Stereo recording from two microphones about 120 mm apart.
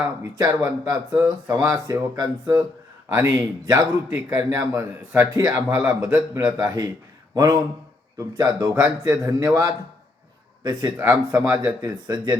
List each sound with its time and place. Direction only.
0.9 s a man's voice: 30° right (ahead or behind)
5.4 s a man's voice: 30° right (ahead or behind)
10.9 s a man's voice: 20° right (ahead or behind); by 12.4 s 35° right (ahead or behind)